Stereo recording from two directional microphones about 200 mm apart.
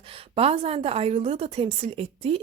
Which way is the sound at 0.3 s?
30° right (ahead or behind).